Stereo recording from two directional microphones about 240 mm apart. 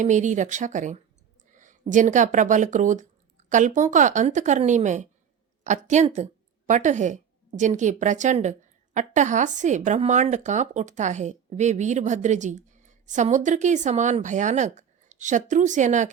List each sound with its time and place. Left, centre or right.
0.0 s a woman's voice: right